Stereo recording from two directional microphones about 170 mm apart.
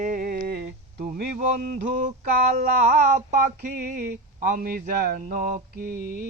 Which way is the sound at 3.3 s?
45° right (ahead or behind).